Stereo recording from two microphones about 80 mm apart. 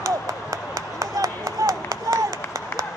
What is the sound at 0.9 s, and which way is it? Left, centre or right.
Clapping, right.